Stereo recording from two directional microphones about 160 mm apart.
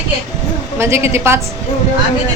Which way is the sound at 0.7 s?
15° right (ahead or behind).